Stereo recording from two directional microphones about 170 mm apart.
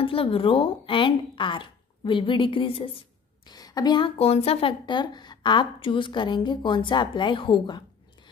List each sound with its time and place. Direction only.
0.0 s speech: 35° left (ahead or behind)